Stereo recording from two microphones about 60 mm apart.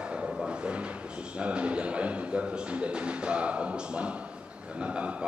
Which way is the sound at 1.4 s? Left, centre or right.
Centre.